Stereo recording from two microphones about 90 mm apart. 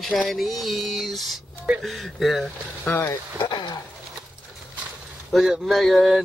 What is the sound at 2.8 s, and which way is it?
Speech, 25° left (ahead or behind).